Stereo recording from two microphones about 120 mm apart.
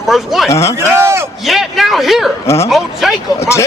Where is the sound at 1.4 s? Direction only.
Centre (ahead or behind).